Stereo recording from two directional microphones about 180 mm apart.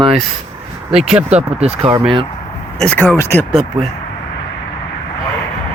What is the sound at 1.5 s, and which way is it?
Speech, 35° right (ahead or behind).